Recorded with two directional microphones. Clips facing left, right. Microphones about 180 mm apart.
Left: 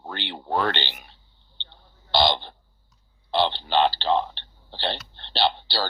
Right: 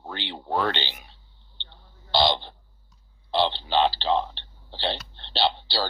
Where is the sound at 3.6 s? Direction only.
55° left (ahead or behind).